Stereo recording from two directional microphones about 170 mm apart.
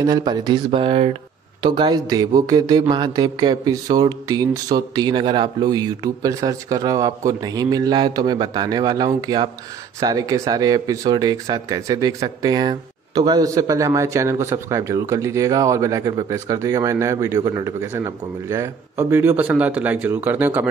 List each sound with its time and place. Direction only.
0.0 s a man's voice: 20° right (ahead or behind)